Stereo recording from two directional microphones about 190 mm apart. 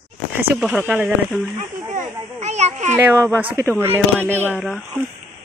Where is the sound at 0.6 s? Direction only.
5° right (ahead or behind).